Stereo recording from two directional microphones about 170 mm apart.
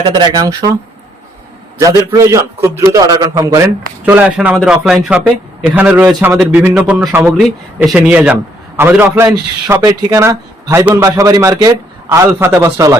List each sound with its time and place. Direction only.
0.0 s a man's voice: 25° right (ahead or behind)
1.8 s a man's voice: 20° right (ahead or behind)
4.0 s a man's voice: 10° right (ahead or behind)